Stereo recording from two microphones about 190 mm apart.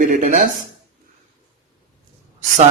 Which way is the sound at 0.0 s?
45° right (ahead or behind).